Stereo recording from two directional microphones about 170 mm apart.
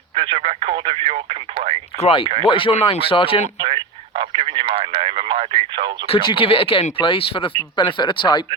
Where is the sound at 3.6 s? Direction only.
30° right (ahead or behind).